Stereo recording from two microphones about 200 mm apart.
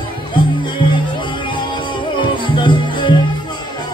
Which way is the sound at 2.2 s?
25° left (ahead or behind).